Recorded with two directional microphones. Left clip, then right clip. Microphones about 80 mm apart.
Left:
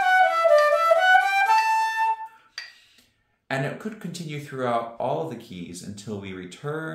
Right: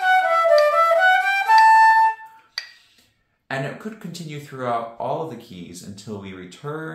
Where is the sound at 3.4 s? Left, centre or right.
Left.